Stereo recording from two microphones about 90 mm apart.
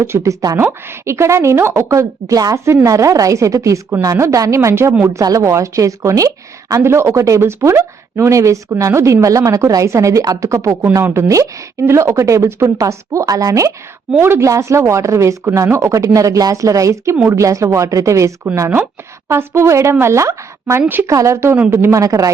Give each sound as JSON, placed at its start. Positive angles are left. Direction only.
{"t": 0.0, "sound": "a woman's voice", "side_deg": -30}